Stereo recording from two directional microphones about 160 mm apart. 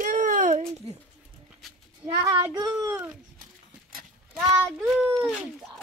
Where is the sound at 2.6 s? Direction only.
20° right (ahead or behind).